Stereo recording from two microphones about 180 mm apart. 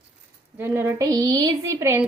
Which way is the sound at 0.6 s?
15° right (ahead or behind).